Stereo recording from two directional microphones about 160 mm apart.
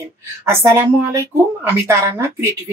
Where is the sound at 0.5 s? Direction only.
15° right (ahead or behind).